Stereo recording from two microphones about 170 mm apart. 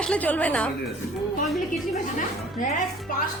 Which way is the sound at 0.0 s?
5° left (ahead or behind).